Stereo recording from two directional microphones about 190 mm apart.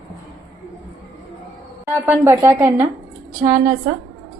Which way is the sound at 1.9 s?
15° right (ahead or behind).